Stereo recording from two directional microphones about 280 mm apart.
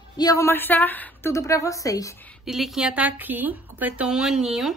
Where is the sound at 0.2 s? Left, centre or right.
Centre.